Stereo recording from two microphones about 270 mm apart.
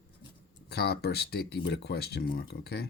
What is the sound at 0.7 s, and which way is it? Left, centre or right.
Speech, left.